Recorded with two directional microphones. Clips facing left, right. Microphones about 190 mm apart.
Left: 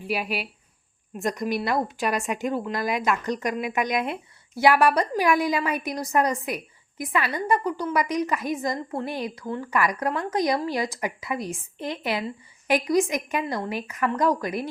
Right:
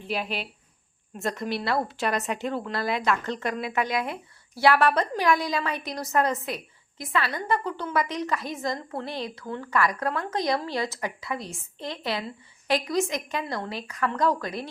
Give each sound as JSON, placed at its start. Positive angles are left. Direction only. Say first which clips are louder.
{"t": 0.1, "sound": "a woman's voice", "louder": "left 2 dB", "side_deg": 10}
{"t": 7.0, "sound": "a woman's voice", "louder": "left 2 dB", "side_deg": 15}
{"t": 10.1, "sound": "a woman's voice", "louder": "left 2 dB", "side_deg": 0}
{"t": 10.3, "sound": "a woman's voice", "louder": "left 4 dB", "side_deg": 15}